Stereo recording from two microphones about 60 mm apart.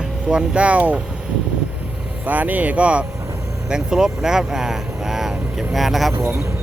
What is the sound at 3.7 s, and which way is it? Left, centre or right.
Speech, centre.